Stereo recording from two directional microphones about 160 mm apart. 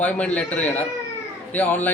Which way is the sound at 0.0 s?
10° left (ahead or behind).